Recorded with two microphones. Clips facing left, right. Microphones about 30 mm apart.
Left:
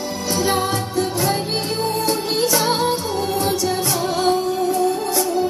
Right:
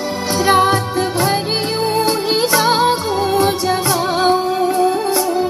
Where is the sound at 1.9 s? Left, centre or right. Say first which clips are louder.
Right 6 dB; right.